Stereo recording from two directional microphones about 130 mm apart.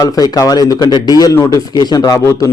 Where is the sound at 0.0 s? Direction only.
25° left (ahead or behind).